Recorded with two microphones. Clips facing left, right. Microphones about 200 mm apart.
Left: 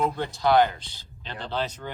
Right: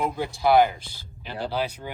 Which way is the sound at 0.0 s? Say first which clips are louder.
Right 1 dB; 10° right (ahead or behind).